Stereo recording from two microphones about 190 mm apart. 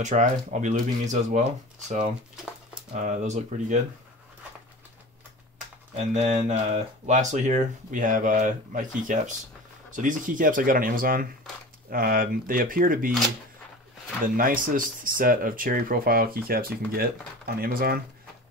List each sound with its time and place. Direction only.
0.0 s speech: 40° right (ahead or behind)
2.9 s speech: 40° right (ahead or behind)
5.9 s speech: 35° right (ahead or behind)
14.2 s speech: 45° right (ahead or behind)